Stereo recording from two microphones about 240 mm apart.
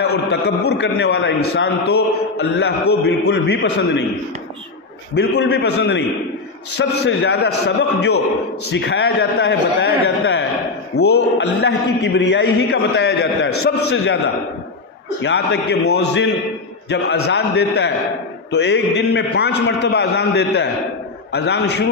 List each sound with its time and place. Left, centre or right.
0.0 s a man's voice: left
5.4 s a man's voice: left